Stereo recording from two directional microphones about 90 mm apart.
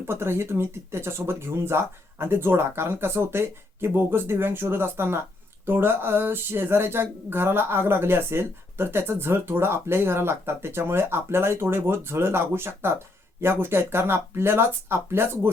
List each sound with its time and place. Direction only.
0.1 s speech: 30° right (ahead or behind)